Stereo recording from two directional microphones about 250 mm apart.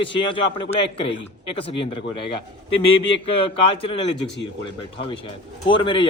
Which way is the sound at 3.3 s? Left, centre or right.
Left.